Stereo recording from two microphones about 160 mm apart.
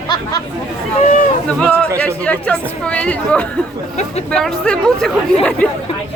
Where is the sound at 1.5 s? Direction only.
5° left (ahead or behind).